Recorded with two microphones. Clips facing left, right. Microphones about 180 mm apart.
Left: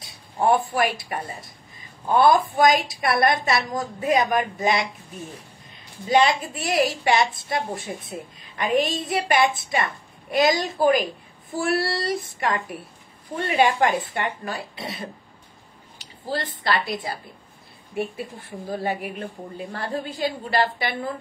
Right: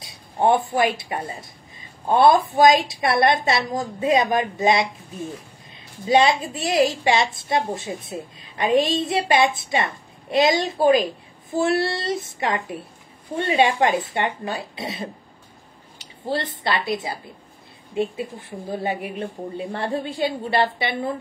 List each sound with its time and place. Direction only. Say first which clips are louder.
0.0 s a woman's voice: right 2 dB; 25° right (ahead or behind)
6.0 s a woman's voice: right 2 dB; 25° right (ahead or behind)
16.3 s a woman's voice: right 1 dB; 25° right (ahead or behind)
18.8 s a woman's voice: right 2 dB; 20° right (ahead or behind)